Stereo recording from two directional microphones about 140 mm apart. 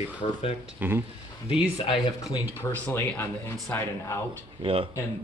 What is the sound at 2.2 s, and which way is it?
Speech, 20° left (ahead or behind).